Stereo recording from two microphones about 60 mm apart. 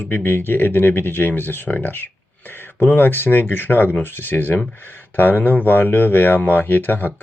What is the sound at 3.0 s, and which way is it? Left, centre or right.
Speech, left.